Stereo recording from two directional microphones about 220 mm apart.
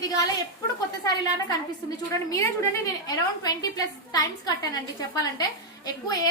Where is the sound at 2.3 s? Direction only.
15° left (ahead or behind).